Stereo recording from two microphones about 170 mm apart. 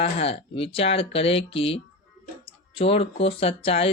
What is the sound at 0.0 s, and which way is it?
Speech, 35° left (ahead or behind).